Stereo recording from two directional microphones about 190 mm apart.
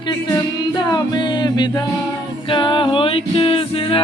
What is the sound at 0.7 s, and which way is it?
Music, 20° left (ahead or behind).